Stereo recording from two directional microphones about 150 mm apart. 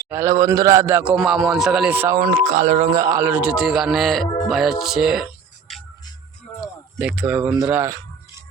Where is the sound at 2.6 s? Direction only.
50° right (ahead or behind).